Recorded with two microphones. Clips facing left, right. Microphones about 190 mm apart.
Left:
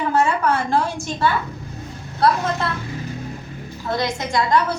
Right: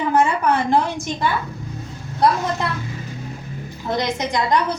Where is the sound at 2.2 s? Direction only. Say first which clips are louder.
Even; 15° right (ahead or behind).